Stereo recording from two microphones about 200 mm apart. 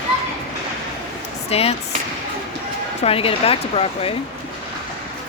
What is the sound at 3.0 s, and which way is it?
Speech, 30° left (ahead or behind).